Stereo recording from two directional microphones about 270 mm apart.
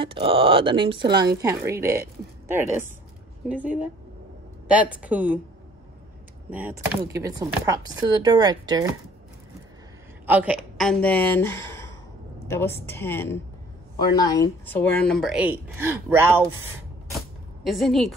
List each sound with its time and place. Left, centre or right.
0.0 s speech: centre
6.5 s speech: centre
10.2 s a woman's voice: centre
17.6 s speech: centre